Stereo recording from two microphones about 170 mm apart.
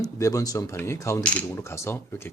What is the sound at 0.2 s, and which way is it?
Speech, 20° left (ahead or behind).